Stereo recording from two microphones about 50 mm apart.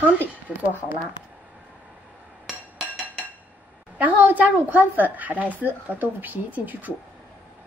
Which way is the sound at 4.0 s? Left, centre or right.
Right.